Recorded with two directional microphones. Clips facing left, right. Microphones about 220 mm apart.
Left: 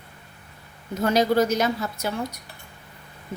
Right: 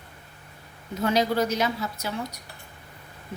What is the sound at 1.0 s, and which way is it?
A woman's voice, 45° left (ahead or behind).